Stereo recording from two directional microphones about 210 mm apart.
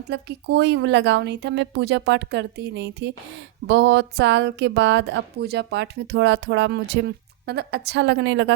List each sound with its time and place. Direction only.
0.1 s a woman's voice: 55° right (ahead or behind)